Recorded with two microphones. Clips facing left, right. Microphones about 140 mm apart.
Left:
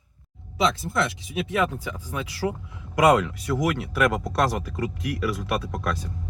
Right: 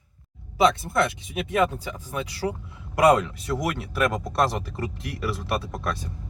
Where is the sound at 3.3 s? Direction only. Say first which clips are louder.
Left 3 dB; 25° right (ahead or behind).